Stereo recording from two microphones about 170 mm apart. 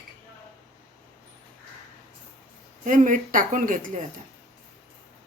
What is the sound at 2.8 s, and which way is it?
Speech, 50° right (ahead or behind).